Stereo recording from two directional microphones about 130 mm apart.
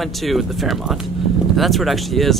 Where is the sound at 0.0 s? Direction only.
Centre (ahead or behind).